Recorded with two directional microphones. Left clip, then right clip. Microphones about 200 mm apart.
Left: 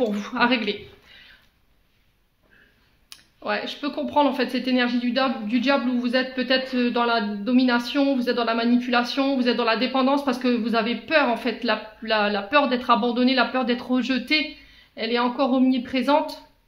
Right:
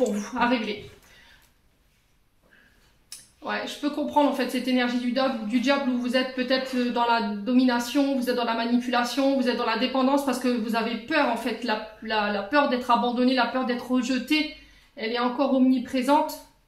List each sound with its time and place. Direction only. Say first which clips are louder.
0.0 s speech: left 2 dB; 45° left (ahead or behind)
3.1 s speech: left 4 dB; 45° left (ahead or behind)